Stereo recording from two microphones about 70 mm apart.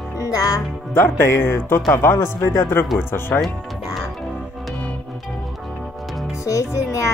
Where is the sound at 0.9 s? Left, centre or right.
Left.